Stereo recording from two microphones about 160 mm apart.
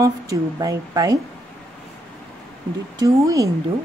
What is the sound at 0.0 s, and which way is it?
A woman's voice, 20° right (ahead or behind).